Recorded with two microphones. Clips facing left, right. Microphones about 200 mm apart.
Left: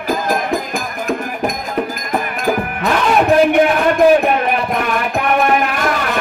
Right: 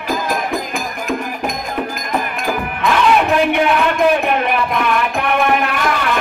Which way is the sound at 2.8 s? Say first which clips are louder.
Right 2 dB; 40° left (ahead or behind).